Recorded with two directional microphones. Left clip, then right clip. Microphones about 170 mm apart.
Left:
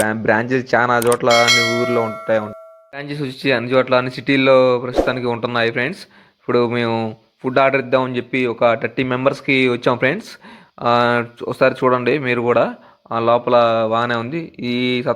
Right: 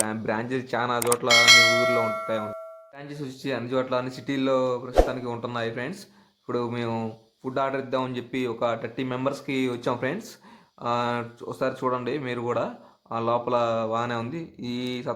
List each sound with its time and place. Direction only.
0.0 s speech: 35° left (ahead or behind)
1.3 s bell: centre (ahead or behind)
2.2 s speech: 30° left (ahead or behind)